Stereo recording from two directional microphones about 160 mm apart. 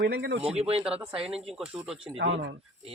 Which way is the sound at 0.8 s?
5° right (ahead or behind).